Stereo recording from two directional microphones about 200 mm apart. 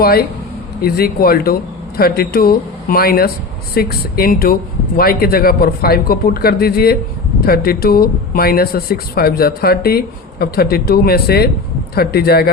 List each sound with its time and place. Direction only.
0.0 s speech: 50° left (ahead or behind)